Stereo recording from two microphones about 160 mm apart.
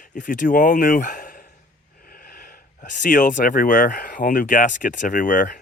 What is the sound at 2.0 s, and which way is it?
Snort, 70° left (ahead or behind).